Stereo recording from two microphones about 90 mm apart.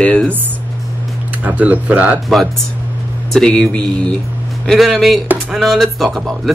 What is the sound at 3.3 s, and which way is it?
Speech, 10° left (ahead or behind).